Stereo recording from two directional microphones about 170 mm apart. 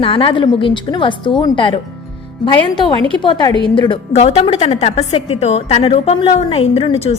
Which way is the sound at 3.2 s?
25° left (ahead or behind).